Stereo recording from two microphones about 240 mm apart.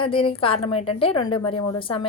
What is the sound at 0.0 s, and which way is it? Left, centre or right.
A woman's voice, left.